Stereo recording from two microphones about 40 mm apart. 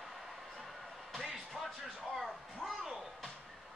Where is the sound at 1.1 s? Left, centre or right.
Centre.